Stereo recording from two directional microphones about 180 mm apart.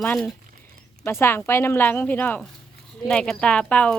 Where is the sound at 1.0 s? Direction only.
15° left (ahead or behind).